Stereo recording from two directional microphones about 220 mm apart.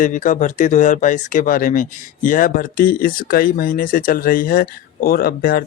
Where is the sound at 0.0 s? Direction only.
35° left (ahead or behind).